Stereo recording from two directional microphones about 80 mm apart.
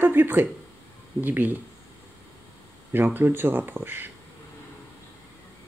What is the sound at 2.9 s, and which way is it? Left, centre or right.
Speech, right.